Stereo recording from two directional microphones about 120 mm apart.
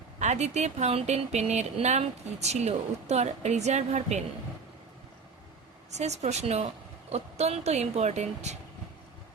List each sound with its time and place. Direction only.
0.2 s speech: 70° right (ahead or behind)
6.0 s speech: 70° right (ahead or behind)